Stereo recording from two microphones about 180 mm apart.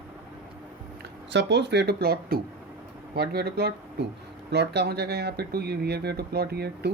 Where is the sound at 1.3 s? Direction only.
75° right (ahead or behind).